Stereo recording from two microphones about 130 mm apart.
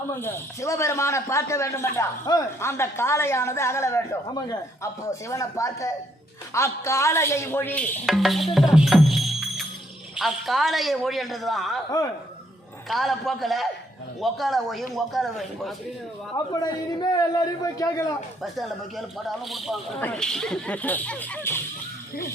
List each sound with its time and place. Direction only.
0.2 s a man's voice: 20° left (ahead or behind)
8.0 s music: centre (ahead or behind)
10.2 s a woman's voice: centre (ahead or behind)
11.9 s a man's voice: 25° left (ahead or behind)
12.9 s a woman's voice: centre (ahead or behind)
16.3 s a man's voice: 30° left (ahead or behind)
18.4 s a woman's voice: centre (ahead or behind); by 21.6 s 15° left (ahead or behind)